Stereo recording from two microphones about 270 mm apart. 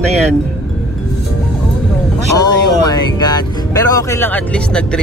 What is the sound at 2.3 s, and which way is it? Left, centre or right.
Speech, centre.